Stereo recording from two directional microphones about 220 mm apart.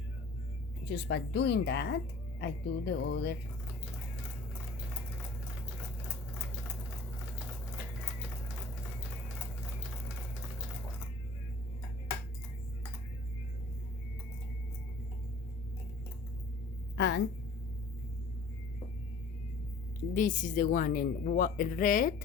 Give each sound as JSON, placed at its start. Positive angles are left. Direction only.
{"t": 0.9, "sound": "a woman's voice", "side_deg": 50}
{"t": 17.0, "sound": "a sound", "side_deg": 55}
{"t": 20.1, "sound": "speech", "side_deg": 35}